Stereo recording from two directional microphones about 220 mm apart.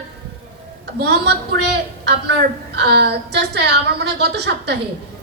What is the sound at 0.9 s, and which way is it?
Speech, 50° right (ahead or behind).